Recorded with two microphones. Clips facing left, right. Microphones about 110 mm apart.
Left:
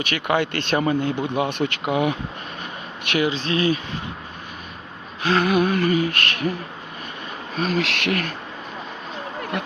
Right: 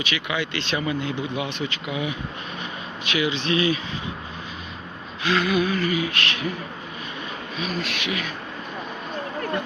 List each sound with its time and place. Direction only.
0.0 s speech: 50° left (ahead or behind)
3.2 s speech: 40° left (ahead or behind)
5.2 s speech: 35° left (ahead or behind)
5.6 s speech: 60° left (ahead or behind)
5.9 s speech: 45° left (ahead or behind)
7.5 s speech: 80° left